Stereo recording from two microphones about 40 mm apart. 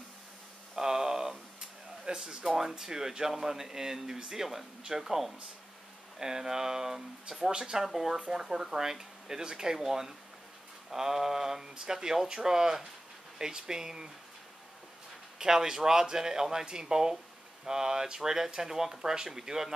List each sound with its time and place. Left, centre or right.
0.7 s a sound: centre
2.4 s speech: centre
15.3 s speech: centre